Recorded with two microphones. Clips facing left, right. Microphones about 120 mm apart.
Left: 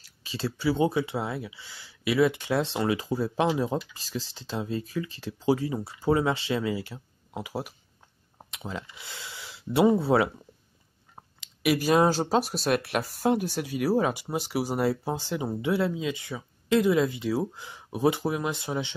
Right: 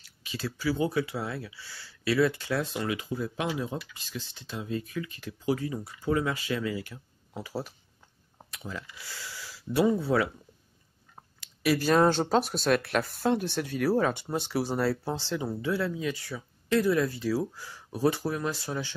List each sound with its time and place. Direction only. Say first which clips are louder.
0.2 s speech: left 3 dB; 30° left (ahead or behind)